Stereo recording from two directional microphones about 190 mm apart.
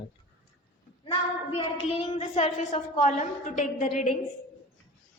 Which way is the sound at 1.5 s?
30° left (ahead or behind).